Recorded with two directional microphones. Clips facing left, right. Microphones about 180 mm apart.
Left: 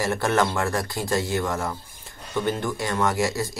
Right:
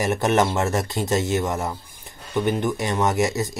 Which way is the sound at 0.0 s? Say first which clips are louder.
Right 3 dB; 20° right (ahead or behind).